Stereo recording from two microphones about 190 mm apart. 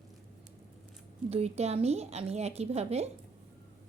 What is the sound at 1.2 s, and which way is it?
A woman's voice, 35° right (ahead or behind).